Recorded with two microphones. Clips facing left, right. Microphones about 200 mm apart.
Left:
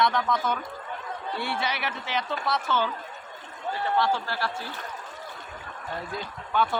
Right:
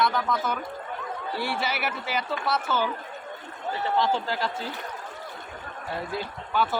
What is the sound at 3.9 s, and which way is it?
Speech, 20° right (ahead or behind).